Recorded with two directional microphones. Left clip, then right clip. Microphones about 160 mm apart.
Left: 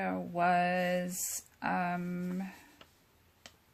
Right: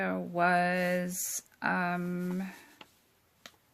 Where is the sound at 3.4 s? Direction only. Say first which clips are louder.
Right 3 dB; 25° right (ahead or behind).